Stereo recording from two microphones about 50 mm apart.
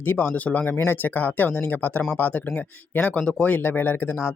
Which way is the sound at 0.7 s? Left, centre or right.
Left.